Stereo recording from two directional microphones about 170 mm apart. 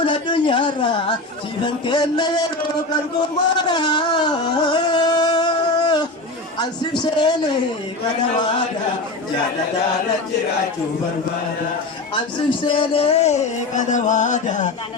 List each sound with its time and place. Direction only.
0.0 s a woman's voice: 30° left (ahead or behind)
2.9 s a sound: 25° left (ahead or behind)
6.6 s a woman's voice: 25° left (ahead or behind)
12.1 s a man's voice: 30° left (ahead or behind); by 14.7 s 45° left (ahead or behind)